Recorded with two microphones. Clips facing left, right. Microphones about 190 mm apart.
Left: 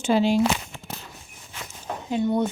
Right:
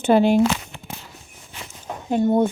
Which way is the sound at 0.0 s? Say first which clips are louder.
Right 5 dB; 55° right (ahead or behind).